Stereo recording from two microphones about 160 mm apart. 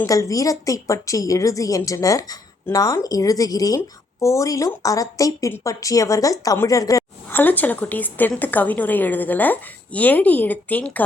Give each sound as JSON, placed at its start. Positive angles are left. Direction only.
{"t": 0.0, "sound": "a woman's voice", "side_deg": 20}